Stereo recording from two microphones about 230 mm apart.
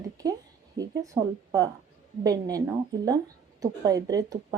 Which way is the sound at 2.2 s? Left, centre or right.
Centre.